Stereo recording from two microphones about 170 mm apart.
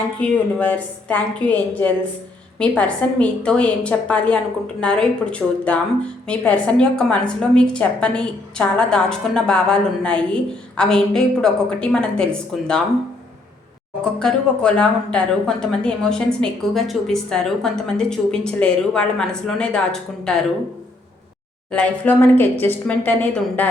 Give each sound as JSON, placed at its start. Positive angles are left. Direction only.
{"t": 0.2, "sound": "a woman's voice", "side_deg": 10}
{"t": 14.0, "sound": "a woman's voice", "side_deg": 5}
{"t": 21.7, "sound": "speech", "side_deg": 10}